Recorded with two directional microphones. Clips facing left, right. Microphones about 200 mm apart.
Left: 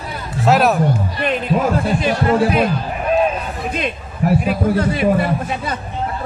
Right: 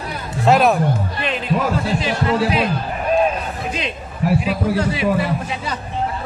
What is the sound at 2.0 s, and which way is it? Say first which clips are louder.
Speech: left 4 dB; 50° left (ahead or behind).